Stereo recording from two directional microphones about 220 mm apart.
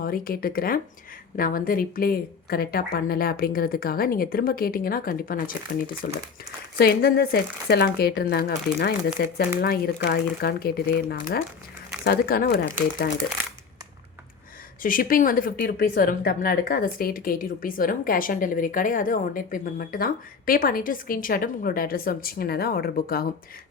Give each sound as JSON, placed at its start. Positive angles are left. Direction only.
{"t": 0.0, "sound": "speech", "side_deg": 40}
{"t": 14.8, "sound": "speech", "side_deg": 40}